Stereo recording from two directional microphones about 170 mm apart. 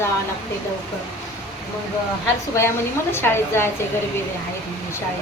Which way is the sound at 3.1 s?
15° left (ahead or behind).